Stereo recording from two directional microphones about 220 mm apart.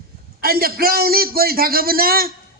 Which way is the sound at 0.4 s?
45° right (ahead or behind).